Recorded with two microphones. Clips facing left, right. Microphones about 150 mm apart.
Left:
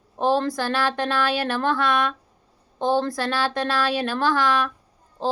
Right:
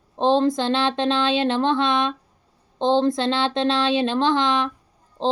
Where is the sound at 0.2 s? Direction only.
20° right (ahead or behind).